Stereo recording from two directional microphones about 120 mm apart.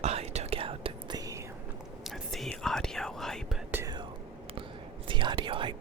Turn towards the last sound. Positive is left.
turn(degrees=-45)  # may be behind; listen again after turning